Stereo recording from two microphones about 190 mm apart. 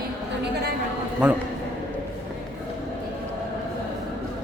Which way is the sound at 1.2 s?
5° right (ahead or behind).